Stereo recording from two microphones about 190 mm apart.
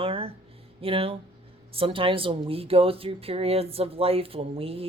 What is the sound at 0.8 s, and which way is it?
Speech, 30° right (ahead or behind).